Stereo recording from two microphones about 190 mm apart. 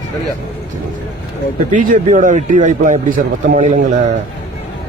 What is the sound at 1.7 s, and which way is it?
A man's voice, 45° right (ahead or behind).